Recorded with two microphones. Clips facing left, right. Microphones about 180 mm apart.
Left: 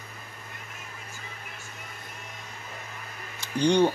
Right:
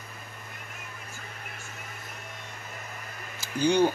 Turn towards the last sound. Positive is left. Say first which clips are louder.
# left 1 dB
turn(degrees=-5)  # may be behind; listen again after turning